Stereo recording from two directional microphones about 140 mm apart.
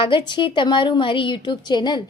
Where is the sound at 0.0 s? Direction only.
35° left (ahead or behind).